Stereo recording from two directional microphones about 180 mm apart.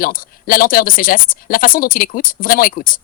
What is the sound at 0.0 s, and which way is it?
Speech, 50° left (ahead or behind).